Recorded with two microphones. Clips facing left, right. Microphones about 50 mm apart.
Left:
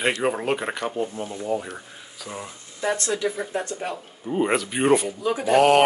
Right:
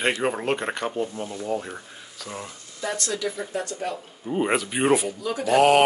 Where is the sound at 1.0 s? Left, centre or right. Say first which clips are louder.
Left 1 dB; centre.